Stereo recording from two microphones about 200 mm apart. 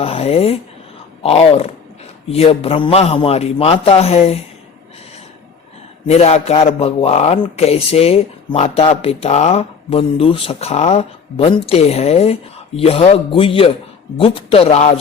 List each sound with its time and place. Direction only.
0.0 s a man's voice: 30° left (ahead or behind)
6.1 s a man's voice: 30° left (ahead or behind)